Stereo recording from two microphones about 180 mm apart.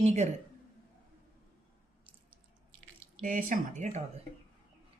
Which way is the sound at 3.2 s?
45° right (ahead or behind).